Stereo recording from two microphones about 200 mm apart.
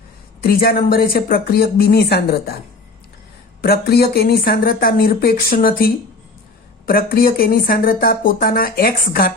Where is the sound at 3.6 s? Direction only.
50° left (ahead or behind).